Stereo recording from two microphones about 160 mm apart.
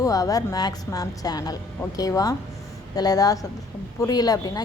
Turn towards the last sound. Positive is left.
turn(degrees=25)  # may be behind; listen again after turning